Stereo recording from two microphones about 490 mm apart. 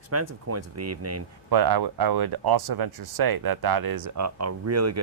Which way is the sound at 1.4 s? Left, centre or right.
Right.